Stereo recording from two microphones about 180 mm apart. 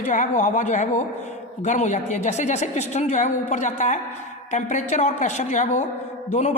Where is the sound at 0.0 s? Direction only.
45° left (ahead or behind).